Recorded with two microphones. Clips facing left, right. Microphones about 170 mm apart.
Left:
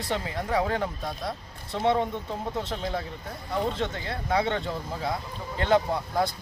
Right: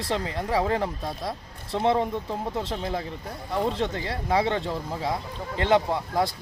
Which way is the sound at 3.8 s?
25° right (ahead or behind).